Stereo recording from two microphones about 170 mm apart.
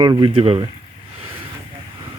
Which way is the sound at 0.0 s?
25° right (ahead or behind).